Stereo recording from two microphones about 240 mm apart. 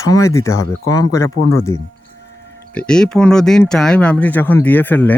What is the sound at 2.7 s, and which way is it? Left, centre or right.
Speech, centre.